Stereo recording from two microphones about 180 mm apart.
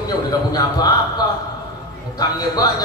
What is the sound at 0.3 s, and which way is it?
Speech, 20° left (ahead or behind).